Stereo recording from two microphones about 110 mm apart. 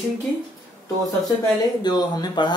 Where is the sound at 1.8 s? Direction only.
40° left (ahead or behind).